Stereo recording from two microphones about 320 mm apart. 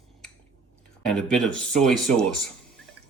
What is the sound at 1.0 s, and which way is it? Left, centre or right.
Speech, centre.